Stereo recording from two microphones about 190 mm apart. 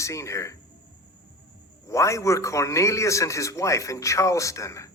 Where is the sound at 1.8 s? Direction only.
15° left (ahead or behind).